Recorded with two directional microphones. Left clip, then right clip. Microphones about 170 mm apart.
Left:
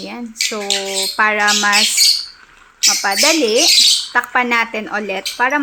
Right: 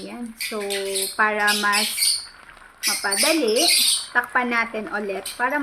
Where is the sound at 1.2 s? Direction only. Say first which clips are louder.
Left 6 dB; 45° left (ahead or behind).